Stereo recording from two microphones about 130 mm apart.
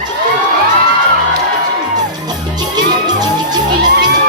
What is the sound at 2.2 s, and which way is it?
Music, 30° right (ahead or behind).